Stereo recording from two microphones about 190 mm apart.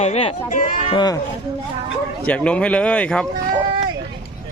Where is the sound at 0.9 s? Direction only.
20° left (ahead or behind).